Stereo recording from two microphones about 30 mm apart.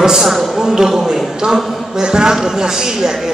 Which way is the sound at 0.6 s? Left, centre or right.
Centre.